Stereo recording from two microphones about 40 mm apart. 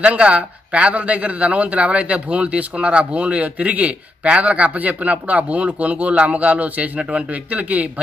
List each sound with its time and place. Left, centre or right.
0.0 s speech: right
7.0 s speech: right
7.5 s speech: right